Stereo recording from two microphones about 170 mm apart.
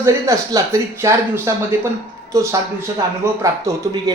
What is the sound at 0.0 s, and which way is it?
Speech, 20° right (ahead or behind).